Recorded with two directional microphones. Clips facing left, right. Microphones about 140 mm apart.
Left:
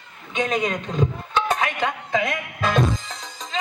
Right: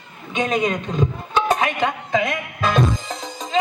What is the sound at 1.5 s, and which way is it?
Music, 25° right (ahead or behind).